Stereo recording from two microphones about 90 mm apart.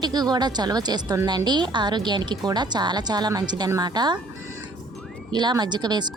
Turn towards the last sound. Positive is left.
turn(degrees=-50)  # may be behind; listen again after turning